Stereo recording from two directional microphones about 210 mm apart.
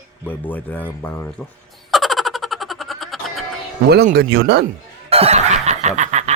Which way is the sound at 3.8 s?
50° right (ahead or behind).